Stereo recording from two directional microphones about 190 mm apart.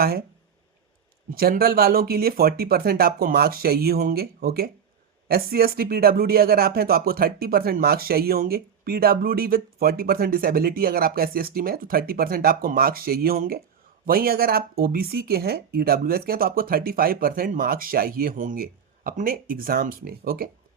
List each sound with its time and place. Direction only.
1.3 s speech: 50° right (ahead or behind)